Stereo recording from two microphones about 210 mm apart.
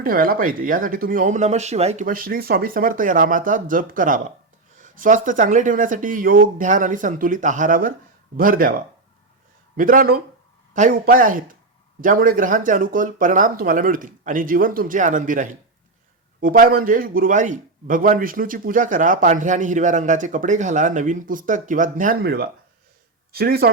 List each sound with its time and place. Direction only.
0.0 s a man's voice: 45° right (ahead or behind)
9.7 s a man's voice: 40° right (ahead or behind)